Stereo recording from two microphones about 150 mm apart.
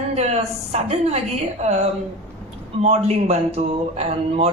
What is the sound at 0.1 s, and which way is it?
A woman's voice, 45° right (ahead or behind).